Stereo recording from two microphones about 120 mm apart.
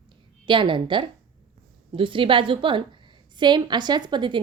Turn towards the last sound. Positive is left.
turn(degrees=-40)  # may be behind; listen again after turning